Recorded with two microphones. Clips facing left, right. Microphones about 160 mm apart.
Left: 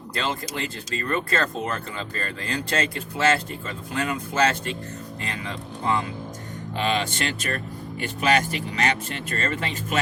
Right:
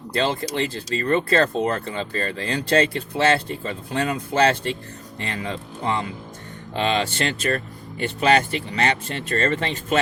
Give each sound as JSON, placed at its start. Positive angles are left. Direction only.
{"t": 0.1, "sound": "speech", "side_deg": -30}